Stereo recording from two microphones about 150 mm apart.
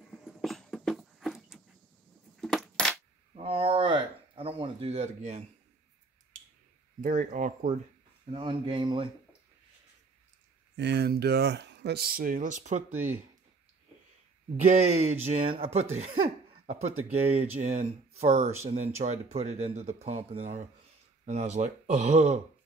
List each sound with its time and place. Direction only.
0.0 s a sound: centre (ahead or behind)
2.4 s coin: 5° left (ahead or behind)
3.4 s a sound: 40° right (ahead or behind)
7.0 s speech: 60° right (ahead or behind)
8.3 s speech: 35° right (ahead or behind)
11.0 s speech: 90° right; by 12.8 s 55° right (ahead or behind)
12.9 s speech: 10° right (ahead or behind)
14.7 s speech: 50° right (ahead or behind)